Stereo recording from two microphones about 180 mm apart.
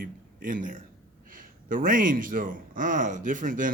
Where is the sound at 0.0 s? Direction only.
50° right (ahead or behind).